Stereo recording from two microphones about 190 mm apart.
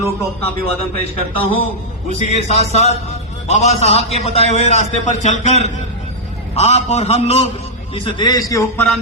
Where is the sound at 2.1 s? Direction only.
35° left (ahead or behind).